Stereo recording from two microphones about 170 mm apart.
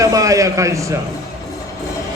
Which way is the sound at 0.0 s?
20° right (ahead or behind).